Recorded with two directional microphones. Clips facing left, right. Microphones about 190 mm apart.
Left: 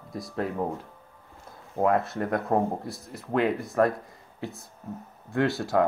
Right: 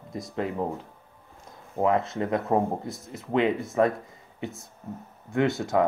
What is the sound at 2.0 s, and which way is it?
Speech, 20° right (ahead or behind).